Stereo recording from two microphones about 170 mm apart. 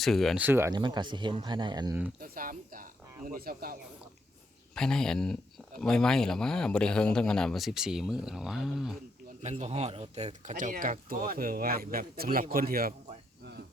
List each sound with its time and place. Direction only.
0.0 s speech: centre (ahead or behind)
0.4 s speech: 15° right (ahead or behind)
0.7 s speech: 25° right (ahead or behind)
2.2 s speech: 55° right (ahead or behind)
4.7 s speech: 5° left (ahead or behind)
9.4 s speech: 40° right (ahead or behind); by 12.9 s 60° right (ahead or behind)